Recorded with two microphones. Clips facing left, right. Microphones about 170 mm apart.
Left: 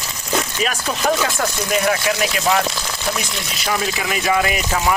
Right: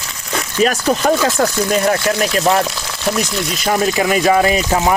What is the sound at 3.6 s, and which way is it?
Speech, 45° right (ahead or behind).